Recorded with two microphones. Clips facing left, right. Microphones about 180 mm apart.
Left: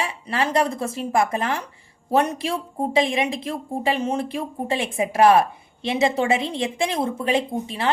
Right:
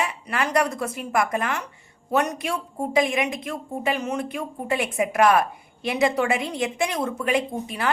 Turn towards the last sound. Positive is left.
turn(degrees=25)  # may be behind; listen again after turning